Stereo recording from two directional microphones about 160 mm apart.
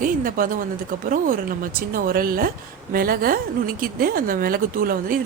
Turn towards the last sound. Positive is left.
turn(degrees=-65)  # may be behind; listen again after turning